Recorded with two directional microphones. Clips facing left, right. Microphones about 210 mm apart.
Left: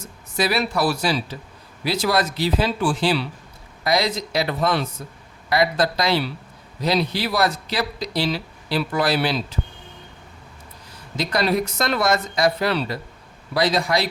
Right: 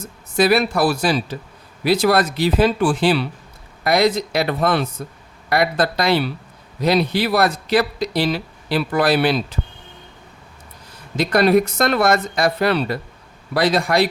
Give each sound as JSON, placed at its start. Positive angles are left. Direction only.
{"t": 0.3, "sound": "speech", "side_deg": -50}
{"t": 11.2, "sound": "speech", "side_deg": -55}